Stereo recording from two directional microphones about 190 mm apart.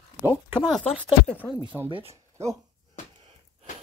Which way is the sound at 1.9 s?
25° right (ahead or behind).